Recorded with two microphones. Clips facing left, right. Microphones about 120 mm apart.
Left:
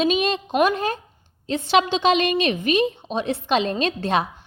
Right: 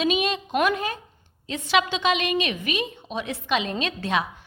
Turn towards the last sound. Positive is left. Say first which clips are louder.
# left 4 dB
turn(degrees=35)  # may be behind; listen again after turning